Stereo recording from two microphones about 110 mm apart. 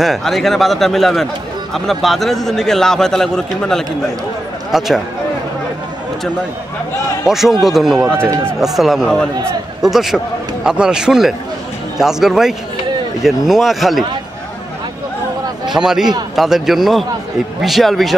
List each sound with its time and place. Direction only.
0.0 s a man's voice: centre (ahead or behind)
7.2 s a man's voice: 5° right (ahead or behind)
8.2 s speech: 20° right (ahead or behind)
8.5 s a man's voice: centre (ahead or behind)
15.7 s a man's voice: 5° right (ahead or behind)